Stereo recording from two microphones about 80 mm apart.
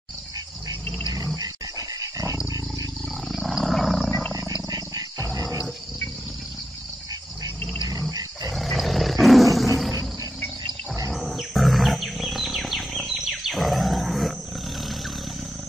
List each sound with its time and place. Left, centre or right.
1.1 s dog: right
3.3 s wild animals: centre
4.6 s wild animals: right
8.5 s roar: centre
11.1 s wild animals: centre